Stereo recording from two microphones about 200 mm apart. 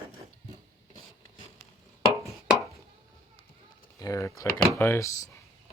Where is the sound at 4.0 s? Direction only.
15° left (ahead or behind).